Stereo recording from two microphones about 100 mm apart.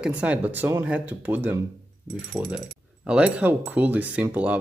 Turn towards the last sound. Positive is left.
turn(degrees=-15)  # may be behind; listen again after turning